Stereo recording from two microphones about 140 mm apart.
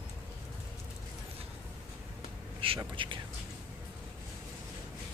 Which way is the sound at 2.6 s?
40° right (ahead or behind).